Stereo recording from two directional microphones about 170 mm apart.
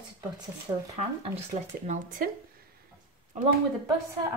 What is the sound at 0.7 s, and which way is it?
Speech, 20° right (ahead or behind).